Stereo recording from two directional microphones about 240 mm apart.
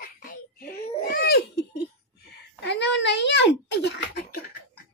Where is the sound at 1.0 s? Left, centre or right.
Left.